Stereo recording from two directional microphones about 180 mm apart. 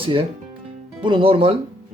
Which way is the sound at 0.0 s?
30° right (ahead or behind).